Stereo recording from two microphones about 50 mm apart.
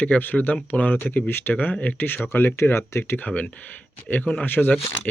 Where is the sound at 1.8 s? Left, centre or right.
Left.